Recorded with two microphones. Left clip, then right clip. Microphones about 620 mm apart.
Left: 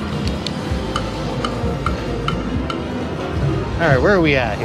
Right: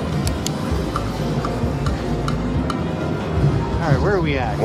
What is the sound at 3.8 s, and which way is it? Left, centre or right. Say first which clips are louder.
Speech: left 7 dB; left.